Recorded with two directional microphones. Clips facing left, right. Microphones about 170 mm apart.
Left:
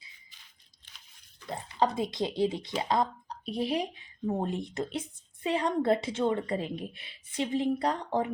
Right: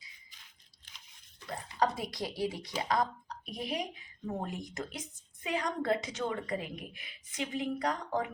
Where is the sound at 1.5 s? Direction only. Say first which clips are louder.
Left 3 dB; 25° left (ahead or behind).